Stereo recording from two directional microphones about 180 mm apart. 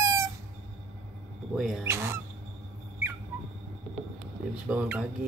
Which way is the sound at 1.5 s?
Centre (ahead or behind).